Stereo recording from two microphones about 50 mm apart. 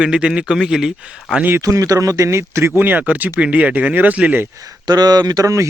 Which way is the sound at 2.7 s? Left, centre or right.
Right.